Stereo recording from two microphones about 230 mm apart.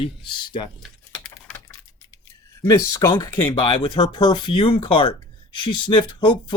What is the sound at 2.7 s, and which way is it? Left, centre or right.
Speech, centre.